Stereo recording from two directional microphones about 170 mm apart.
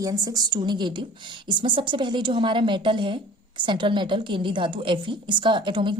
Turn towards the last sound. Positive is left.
turn(degrees=-30)  # may be behind; listen again after turning